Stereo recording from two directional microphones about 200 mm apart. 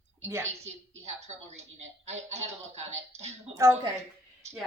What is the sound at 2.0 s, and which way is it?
Speech, 35° right (ahead or behind).